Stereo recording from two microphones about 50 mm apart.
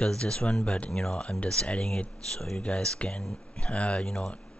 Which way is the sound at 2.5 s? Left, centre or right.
Centre.